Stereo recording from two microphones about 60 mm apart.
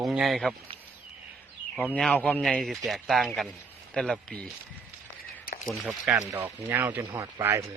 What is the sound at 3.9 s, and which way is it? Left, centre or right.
Speech, centre.